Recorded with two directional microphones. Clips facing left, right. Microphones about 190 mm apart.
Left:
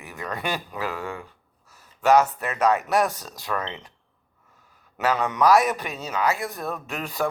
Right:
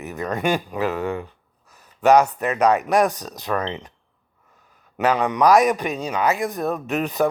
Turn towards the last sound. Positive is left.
turn(degrees=-20)  # may be behind; listen again after turning